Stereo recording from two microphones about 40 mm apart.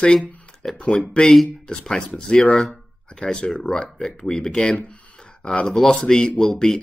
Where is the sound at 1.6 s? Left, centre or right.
Centre.